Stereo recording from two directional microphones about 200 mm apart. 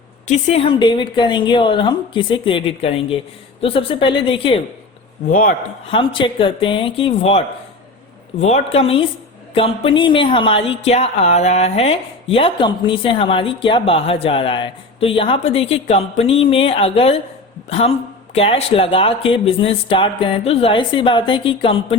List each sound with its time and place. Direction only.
0.3 s a woman's voice: 35° left (ahead or behind)
5.3 s a man's voice: 45° left (ahead or behind)
5.9 s a woman's voice: 25° left (ahead or behind)